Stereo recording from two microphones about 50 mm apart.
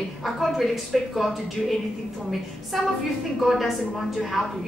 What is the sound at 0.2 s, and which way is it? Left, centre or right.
Speech, centre.